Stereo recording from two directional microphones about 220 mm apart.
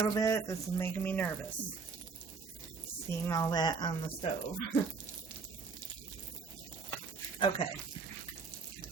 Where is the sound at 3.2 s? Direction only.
15° left (ahead or behind).